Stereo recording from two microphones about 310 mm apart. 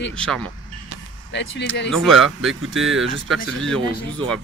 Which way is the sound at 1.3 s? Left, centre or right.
Left.